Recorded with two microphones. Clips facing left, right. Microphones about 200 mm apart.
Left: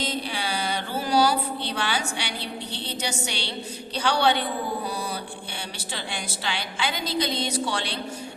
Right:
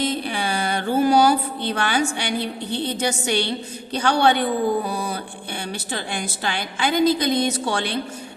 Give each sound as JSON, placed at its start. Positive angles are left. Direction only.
{"t": 0.0, "sound": "mantra", "side_deg": -55}
{"t": 3.9, "sound": "a woman's voice", "side_deg": -50}